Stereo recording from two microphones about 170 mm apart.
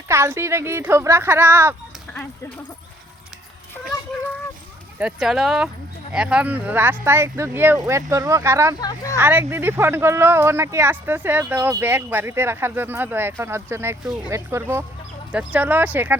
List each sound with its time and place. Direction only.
0.1 s speech: 15° right (ahead or behind)
4.9 s speech: 5° right (ahead or behind)
8.8 s speech: 20° left (ahead or behind)
9.1 s speech: 10° right (ahead or behind)